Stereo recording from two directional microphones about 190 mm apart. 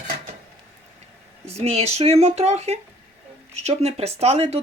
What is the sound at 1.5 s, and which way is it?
Speech, 35° right (ahead or behind).